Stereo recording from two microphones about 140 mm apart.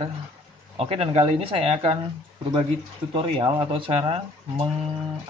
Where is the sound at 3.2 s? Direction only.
40° right (ahead or behind).